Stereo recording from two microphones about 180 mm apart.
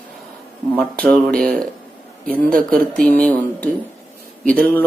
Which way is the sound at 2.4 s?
50° right (ahead or behind).